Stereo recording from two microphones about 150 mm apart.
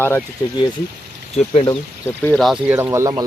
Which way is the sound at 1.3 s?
35° left (ahead or behind).